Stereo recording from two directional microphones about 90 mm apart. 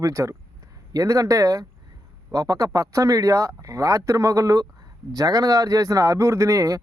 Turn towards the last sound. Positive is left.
turn(degrees=-35)  # may be behind; listen again after turning